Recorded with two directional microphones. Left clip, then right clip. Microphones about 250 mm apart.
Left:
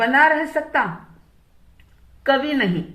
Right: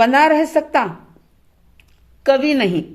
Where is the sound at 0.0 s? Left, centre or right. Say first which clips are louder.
Right 3 dB; right.